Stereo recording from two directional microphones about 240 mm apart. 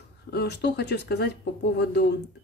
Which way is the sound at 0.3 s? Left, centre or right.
Left.